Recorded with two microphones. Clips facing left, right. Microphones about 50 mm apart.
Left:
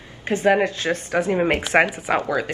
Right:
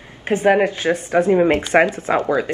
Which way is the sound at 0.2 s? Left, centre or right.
Right.